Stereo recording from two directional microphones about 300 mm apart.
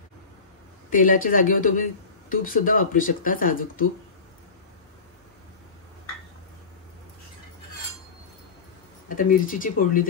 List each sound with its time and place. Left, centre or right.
0.8 s speech: left
9.1 s speech: left